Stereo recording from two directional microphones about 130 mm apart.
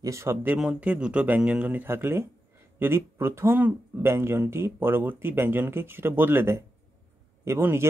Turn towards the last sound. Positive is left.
turn(degrees=-20)  # may be behind; listen again after turning